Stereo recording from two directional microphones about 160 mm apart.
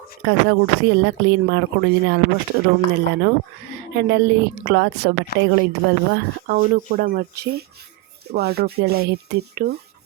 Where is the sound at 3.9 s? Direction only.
90° right.